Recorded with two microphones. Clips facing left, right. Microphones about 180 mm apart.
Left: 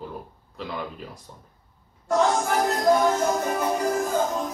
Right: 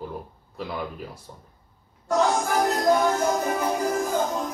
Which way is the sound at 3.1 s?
Centre (ahead or behind).